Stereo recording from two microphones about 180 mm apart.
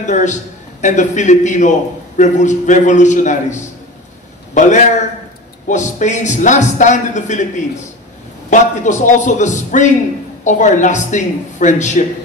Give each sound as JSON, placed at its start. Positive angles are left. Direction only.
{"t": 0.0, "sound": "a man's voice", "side_deg": 40}
{"t": 8.5, "sound": "a man's voice", "side_deg": 45}